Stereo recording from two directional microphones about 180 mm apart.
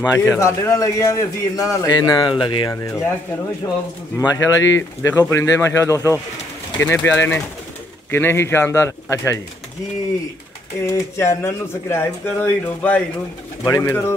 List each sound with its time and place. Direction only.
0.1 s a man's voice: 15° left (ahead or behind)
4.2 s a man's voice: 20° left (ahead or behind)
10.9 s a man's voice: 15° left (ahead or behind)